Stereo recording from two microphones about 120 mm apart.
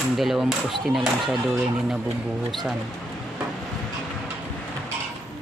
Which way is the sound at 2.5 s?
Centre (ahead or behind).